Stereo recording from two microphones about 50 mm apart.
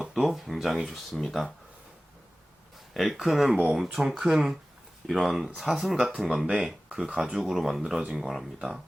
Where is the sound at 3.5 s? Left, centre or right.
Right.